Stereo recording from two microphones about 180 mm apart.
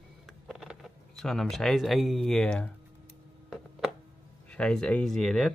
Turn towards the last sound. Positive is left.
turn(degrees=5)  # may be behind; listen again after turning